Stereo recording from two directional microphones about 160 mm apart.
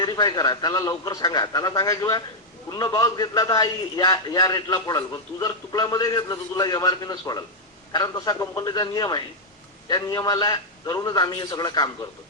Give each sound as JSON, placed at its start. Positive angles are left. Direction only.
{"t": 0.0, "sound": "a man's voice", "side_deg": 25}